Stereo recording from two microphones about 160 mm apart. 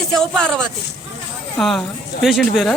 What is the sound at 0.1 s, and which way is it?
Speech, 5° left (ahead or behind).